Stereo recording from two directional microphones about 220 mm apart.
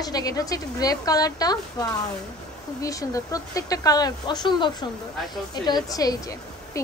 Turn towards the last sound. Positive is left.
turn(degrees=15)  # may be behind; listen again after turning